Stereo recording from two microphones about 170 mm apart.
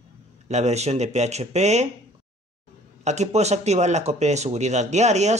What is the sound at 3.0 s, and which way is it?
Speech, 40° right (ahead or behind).